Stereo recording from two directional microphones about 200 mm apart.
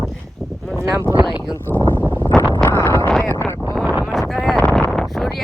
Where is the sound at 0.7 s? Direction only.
15° right (ahead or behind).